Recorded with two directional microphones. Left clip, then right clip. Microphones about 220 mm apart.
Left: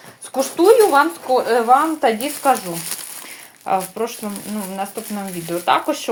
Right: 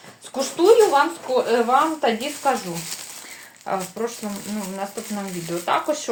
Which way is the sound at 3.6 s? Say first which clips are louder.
Left 5 dB; 40° left (ahead or behind).